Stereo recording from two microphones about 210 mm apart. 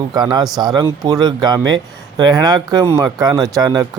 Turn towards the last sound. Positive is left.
turn(degrees=-20)  # may be behind; listen again after turning